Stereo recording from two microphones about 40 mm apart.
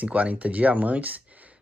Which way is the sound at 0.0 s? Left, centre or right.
Right.